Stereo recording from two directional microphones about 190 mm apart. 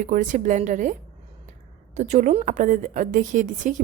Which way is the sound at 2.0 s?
40° right (ahead or behind).